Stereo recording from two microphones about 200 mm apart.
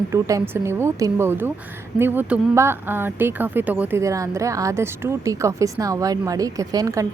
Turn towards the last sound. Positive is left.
turn(degrees=-20)  # may be behind; listen again after turning